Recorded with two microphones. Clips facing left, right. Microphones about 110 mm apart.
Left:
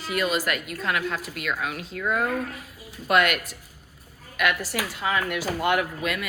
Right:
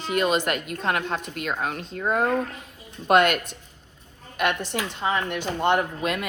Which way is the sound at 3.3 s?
5° left (ahead or behind).